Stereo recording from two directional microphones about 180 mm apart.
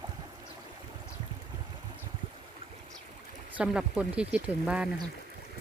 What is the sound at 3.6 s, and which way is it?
Speech, 5° right (ahead or behind).